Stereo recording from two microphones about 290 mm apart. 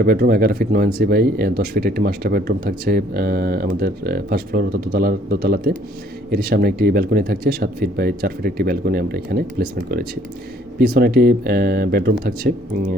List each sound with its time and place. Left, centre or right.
0.0 s speech: right